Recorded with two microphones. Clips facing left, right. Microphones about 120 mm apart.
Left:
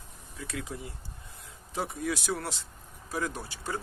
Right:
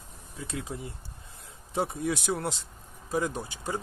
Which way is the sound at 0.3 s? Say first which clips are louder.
Right 2 dB; 25° right (ahead or behind).